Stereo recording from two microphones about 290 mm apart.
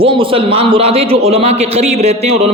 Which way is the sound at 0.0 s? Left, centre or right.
Centre.